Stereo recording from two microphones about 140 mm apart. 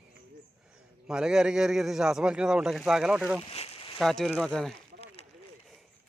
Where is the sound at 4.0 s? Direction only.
Centre (ahead or behind).